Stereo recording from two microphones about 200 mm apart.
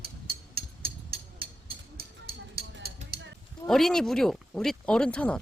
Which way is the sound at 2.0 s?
50° right (ahead or behind).